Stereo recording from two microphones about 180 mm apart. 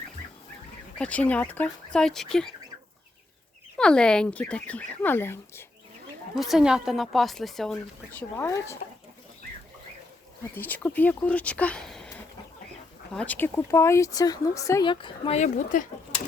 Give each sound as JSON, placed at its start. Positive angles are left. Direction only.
{"t": 0.9, "sound": "a woman's voice", "side_deg": 5}
{"t": 3.8, "sound": "speech", "side_deg": 5}
{"t": 6.3, "sound": "a woman's voice", "side_deg": 0}
{"t": 8.4, "sound": "speech", "side_deg": 15}
{"t": 10.5, "sound": "speech", "side_deg": 10}
{"t": 15.4, "sound": "speech", "side_deg": 45}